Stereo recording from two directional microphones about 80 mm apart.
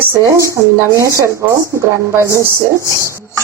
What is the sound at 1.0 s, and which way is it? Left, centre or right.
Speech, right.